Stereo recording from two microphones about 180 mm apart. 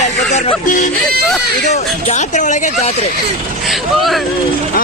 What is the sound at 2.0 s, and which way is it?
Speech, 40° left (ahead or behind).